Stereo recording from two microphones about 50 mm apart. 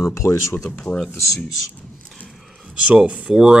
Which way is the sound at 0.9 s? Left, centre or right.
Left.